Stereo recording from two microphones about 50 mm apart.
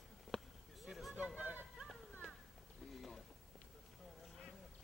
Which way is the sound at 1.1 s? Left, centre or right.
Right.